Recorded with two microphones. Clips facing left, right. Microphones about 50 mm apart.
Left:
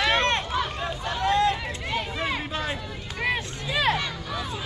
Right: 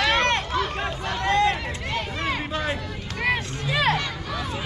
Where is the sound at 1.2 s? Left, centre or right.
Right.